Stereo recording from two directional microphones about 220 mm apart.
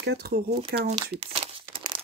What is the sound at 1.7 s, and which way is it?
Crumpling, 25° right (ahead or behind).